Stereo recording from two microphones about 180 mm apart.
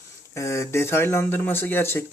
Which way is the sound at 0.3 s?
15° left (ahead or behind).